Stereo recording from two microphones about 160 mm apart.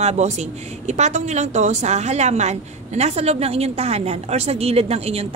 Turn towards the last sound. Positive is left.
turn(degrees=-40)  # may be behind; listen again after turning